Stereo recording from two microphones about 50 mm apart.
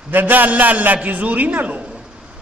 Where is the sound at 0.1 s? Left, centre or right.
Right.